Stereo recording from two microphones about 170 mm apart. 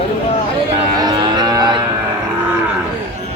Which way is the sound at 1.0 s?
25° right (ahead or behind).